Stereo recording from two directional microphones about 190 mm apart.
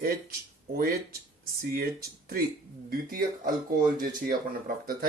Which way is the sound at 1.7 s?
50° right (ahead or behind).